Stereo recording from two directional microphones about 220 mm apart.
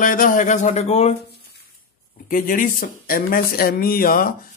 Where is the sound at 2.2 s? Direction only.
40° left (ahead or behind).